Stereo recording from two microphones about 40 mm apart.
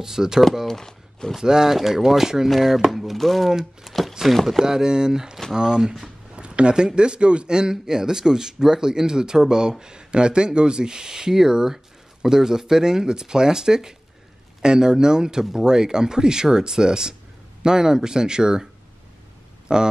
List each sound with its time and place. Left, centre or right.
0.0 s speech: centre
0.7 s speech: centre
1.4 s speech: centre
4.6 s speech: centre
19.7 s speech: centre